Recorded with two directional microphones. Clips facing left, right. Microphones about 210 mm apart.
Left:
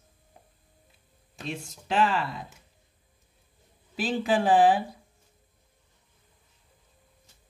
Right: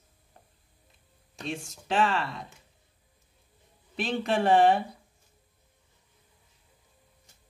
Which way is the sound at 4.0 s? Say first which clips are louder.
Left 2 dB; 5° left (ahead or behind).